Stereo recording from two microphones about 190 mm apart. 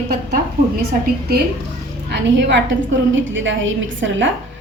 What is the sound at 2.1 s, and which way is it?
Speech, 65° right (ahead or behind).